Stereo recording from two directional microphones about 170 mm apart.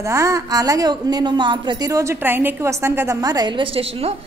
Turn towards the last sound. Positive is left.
turn(degrees=-35)  # may be behind; listen again after turning